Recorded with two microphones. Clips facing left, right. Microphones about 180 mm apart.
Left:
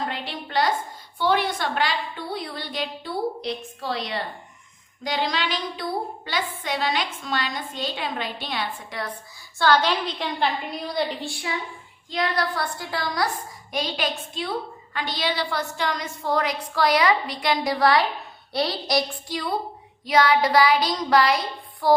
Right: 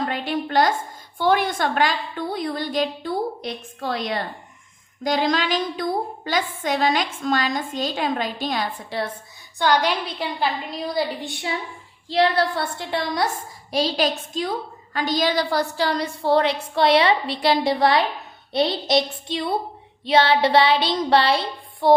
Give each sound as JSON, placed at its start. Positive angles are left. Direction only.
{"t": 0.1, "sound": "a sound", "side_deg": -50}
{"t": 1.2, "sound": "a woman's voice", "side_deg": -50}
{"t": 9.6, "sound": "a woman's voice", "side_deg": -15}
{"t": 11.2, "sound": "a woman's voice", "side_deg": -20}
{"t": 13.7, "sound": "a woman's voice", "side_deg": -35}